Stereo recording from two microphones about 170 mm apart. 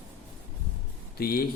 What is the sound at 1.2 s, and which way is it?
Speech, 65° left (ahead or behind).